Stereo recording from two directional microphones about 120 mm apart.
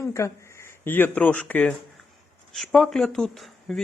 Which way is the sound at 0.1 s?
25° left (ahead or behind).